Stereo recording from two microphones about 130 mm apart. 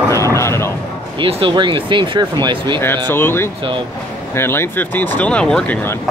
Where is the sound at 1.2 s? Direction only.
40° right (ahead or behind).